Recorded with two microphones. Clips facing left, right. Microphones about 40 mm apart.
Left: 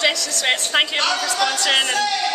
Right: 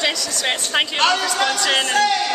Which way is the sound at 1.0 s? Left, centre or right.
Right.